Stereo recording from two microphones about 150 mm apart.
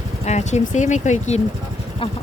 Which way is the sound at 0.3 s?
50° left (ahead or behind).